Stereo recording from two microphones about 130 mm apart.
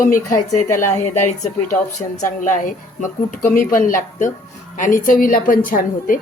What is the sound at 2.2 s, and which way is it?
A woman's voice, 90° left.